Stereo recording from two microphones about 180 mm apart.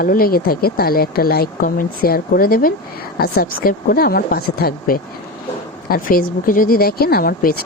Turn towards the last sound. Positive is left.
turn(degrees=55)  # may be behind; listen again after turning